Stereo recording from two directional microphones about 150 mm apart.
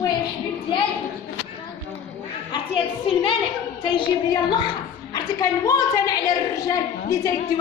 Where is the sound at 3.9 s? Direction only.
30° left (ahead or behind).